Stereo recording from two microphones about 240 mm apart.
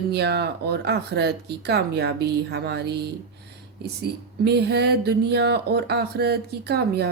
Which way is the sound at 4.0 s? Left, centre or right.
Right.